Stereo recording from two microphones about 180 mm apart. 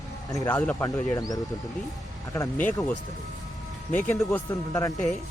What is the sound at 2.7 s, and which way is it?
Speech, 20° left (ahead or behind).